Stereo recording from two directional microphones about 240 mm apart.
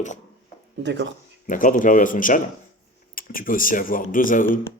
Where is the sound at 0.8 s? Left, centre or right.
Right.